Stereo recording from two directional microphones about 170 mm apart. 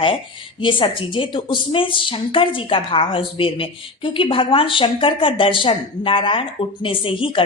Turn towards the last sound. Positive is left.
turn(degrees=30)  # may be behind; listen again after turning